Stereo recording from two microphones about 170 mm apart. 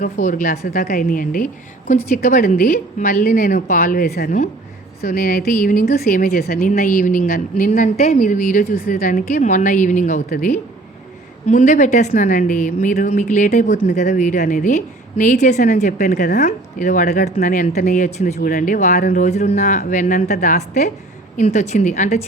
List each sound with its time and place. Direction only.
0.0 s a woman's voice: 50° left (ahead or behind)
10.2 s a woman's voice: 60° left (ahead or behind)
11.4 s a woman's voice: 45° left (ahead or behind)
18.3 s a woman's voice: 60° left (ahead or behind)